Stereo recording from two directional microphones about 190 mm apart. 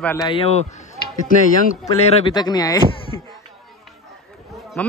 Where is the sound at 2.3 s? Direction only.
20° left (ahead or behind).